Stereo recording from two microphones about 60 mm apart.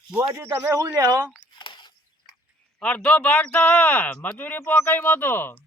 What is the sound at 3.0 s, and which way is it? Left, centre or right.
Speech, left.